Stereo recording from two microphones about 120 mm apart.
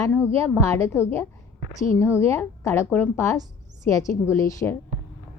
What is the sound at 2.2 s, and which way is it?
A woman's voice, 25° left (ahead or behind).